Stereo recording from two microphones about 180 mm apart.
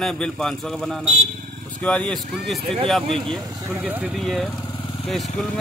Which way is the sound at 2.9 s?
Centre (ahead or behind).